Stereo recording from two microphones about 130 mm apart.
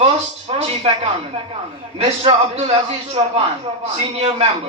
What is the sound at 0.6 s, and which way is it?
Music, 50° right (ahead or behind).